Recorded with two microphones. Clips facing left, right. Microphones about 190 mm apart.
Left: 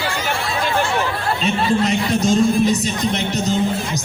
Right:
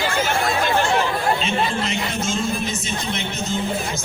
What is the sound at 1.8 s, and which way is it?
Speech, 40° left (ahead or behind).